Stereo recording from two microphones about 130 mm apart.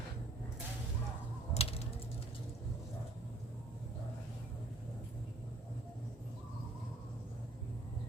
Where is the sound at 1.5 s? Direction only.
50° left (ahead or behind).